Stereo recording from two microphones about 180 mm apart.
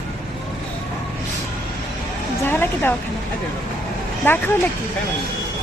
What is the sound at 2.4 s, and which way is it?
Speech, 10° left (ahead or behind).